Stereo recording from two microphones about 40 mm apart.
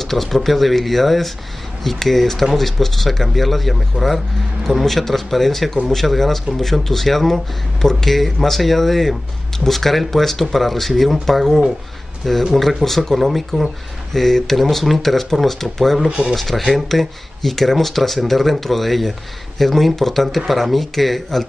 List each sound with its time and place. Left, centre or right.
0.0 s speech: centre
16.1 s speech: centre
16.3 s speech: centre